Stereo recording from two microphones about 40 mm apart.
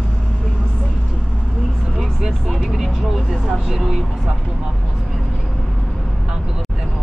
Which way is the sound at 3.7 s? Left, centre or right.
Centre.